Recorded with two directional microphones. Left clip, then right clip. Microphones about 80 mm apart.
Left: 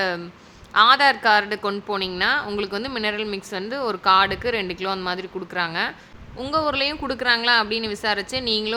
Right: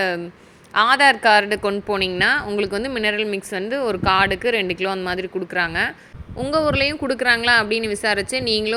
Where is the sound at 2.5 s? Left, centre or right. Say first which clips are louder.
Right 4 dB; right.